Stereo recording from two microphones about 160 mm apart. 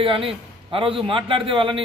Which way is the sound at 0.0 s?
35° right (ahead or behind).